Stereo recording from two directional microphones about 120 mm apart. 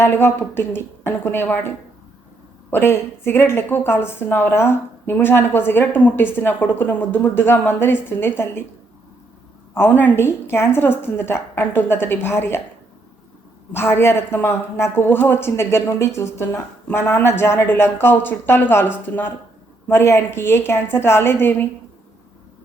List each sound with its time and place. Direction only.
0.0 s a woman's voice: 20° left (ahead or behind)
9.7 s speech: 20° left (ahead or behind)
13.7 s speech: 20° left (ahead or behind)